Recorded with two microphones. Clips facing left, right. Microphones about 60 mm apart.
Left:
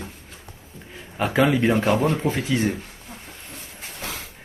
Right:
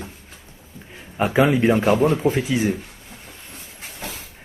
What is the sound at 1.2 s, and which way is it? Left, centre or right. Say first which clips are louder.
Speech: right 2 dB; centre.